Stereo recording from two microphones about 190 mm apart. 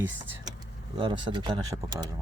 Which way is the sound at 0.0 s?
10° right (ahead or behind).